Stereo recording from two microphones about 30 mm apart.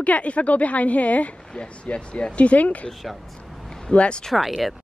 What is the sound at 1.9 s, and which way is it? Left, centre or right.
Speech, left.